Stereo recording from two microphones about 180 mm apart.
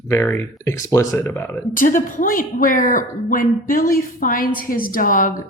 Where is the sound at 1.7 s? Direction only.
50° left (ahead or behind).